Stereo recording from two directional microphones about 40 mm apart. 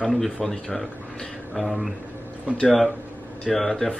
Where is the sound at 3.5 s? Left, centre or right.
Centre.